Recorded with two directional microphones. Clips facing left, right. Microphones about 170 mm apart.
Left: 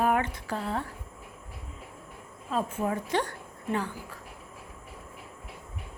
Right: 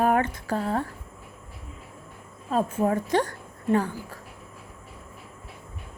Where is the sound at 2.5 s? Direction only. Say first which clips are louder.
Right 5 dB; 40° right (ahead or behind).